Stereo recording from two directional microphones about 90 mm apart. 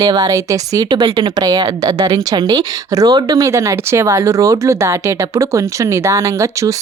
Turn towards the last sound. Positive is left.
turn(degrees=-35)  # may be behind; listen again after turning